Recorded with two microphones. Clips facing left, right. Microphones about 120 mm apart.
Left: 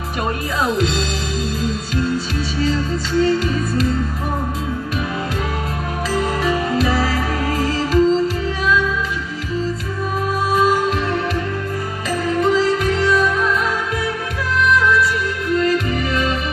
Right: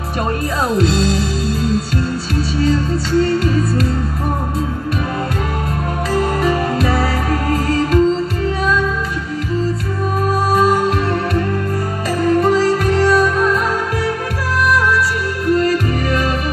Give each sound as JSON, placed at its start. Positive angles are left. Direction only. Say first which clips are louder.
{"t": 0.7, "sound": "music", "louder": "right 5 dB", "side_deg": -40}
{"t": 2.6, "sound": "music", "louder": "right 3 dB", "side_deg": -45}
{"t": 6.1, "sound": "music", "louder": "right 3 dB", "side_deg": -50}
{"t": 12.2, "sound": "music", "louder": "right 3 dB", "side_deg": -45}
{"t": 15.4, "sound": "music", "louder": "right 3 dB", "side_deg": -40}